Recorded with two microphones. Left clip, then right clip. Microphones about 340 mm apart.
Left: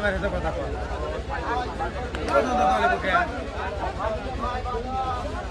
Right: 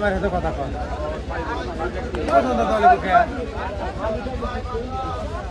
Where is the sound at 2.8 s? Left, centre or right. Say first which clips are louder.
Right 7 dB; centre.